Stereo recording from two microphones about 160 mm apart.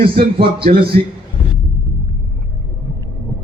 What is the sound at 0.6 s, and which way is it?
Speech, 70° right (ahead or behind).